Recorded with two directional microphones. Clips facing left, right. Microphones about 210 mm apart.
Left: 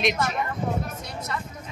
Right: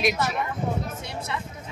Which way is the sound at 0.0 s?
5° right (ahead or behind).